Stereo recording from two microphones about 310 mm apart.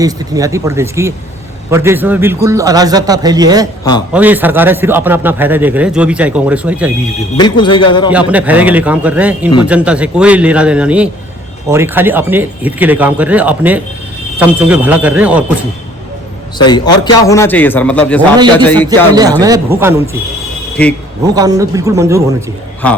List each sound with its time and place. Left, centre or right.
0.0 s a man's voice: centre
7.4 s speech: centre
8.1 s a man's voice: centre
16.6 s a man's voice: centre
19.4 s a man's voice: centre
20.8 s a man's voice: centre
21.3 s a man's voice: centre